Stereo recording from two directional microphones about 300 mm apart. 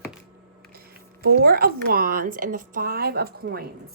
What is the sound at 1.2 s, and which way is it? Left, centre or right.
Speech, right.